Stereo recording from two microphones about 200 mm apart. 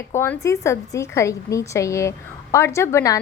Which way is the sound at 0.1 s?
15° left (ahead or behind).